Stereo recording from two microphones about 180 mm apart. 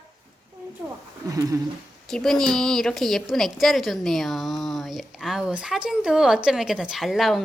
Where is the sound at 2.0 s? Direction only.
5° left (ahead or behind).